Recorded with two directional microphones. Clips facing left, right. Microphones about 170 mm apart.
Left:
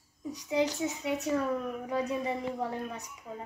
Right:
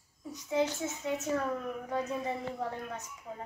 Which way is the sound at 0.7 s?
15° left (ahead or behind).